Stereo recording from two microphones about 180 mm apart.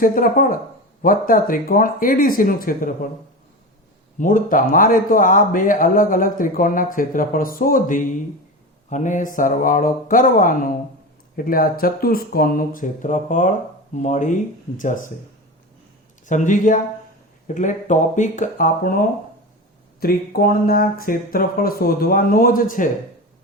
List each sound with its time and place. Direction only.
0.0 s a man's voice: 50° left (ahead or behind)
4.2 s a man's voice: 50° left (ahead or behind)
16.2 s a man's voice: 45° left (ahead or behind)
20.0 s a man's voice: 55° left (ahead or behind)